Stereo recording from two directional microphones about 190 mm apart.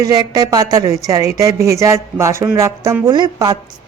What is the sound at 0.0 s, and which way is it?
Speech, 20° right (ahead or behind).